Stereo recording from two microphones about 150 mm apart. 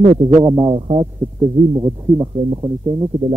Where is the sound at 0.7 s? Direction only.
35° right (ahead or behind).